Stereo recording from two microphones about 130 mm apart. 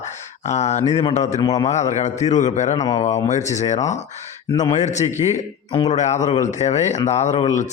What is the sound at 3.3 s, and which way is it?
A man's voice, 65° left (ahead or behind).